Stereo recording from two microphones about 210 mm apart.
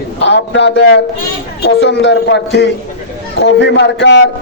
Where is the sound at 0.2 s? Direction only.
60° left (ahead or behind).